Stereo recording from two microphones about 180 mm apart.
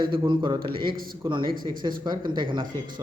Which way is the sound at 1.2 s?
25° right (ahead or behind).